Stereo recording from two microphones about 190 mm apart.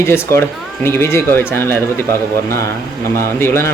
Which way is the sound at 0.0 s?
15° left (ahead or behind).